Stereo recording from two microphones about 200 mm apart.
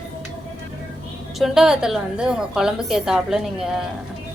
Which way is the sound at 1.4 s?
Centre (ahead or behind).